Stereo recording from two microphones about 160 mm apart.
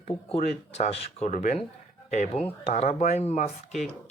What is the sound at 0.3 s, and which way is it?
Speech, 45° left (ahead or behind).